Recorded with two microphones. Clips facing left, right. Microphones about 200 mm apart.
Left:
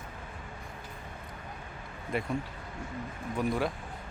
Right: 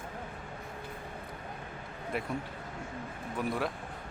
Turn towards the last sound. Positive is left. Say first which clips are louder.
# left 3 dB
turn(degrees=0)  # may be behind; listen again after turning